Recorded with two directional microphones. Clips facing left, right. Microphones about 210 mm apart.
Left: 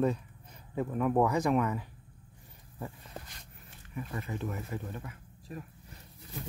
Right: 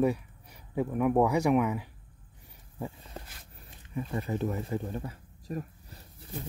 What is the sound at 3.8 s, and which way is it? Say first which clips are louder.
Speech: right 5 dB; 30° right (ahead or behind).